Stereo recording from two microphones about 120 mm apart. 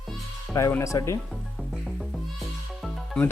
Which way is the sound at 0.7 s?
25° left (ahead or behind).